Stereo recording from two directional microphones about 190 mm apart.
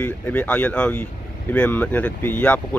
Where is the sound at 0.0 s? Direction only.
5° left (ahead or behind).